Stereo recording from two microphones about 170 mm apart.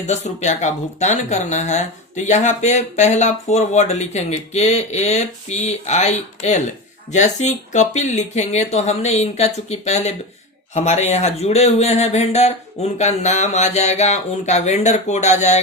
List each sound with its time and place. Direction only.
0.1 s speech: 45° left (ahead or behind)